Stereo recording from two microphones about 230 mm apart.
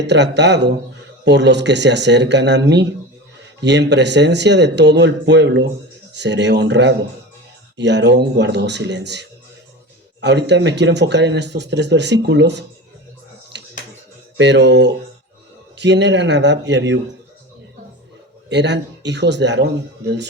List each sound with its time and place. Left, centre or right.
0.0 s speech: right
13.5 s finger snapping: right
14.3 s speech: right
18.4 s speech: right